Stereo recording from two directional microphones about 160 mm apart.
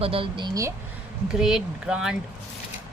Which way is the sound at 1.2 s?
5° right (ahead or behind).